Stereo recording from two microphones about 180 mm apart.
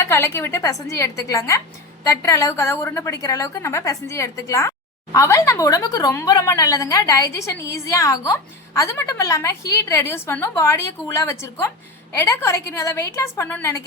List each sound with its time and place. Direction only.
0.0 s speech: 15° left (ahead or behind)